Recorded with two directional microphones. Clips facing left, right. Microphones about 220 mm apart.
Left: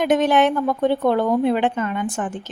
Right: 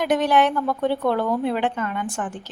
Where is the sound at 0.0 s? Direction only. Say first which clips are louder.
Left 2 dB; 20° left (ahead or behind).